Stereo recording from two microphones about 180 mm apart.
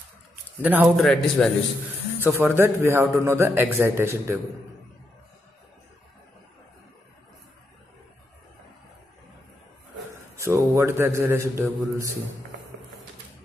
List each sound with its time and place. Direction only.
0.6 s a man's voice: 10° right (ahead or behind)
0.9 s a man's voice: centre (ahead or behind)
2.1 s a man's voice: 10° right (ahead or behind)
10.3 s a man's voice: 15° right (ahead or behind)